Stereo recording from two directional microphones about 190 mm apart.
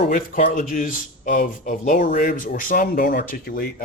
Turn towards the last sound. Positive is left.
turn(degrees=50)  # may be behind; listen again after turning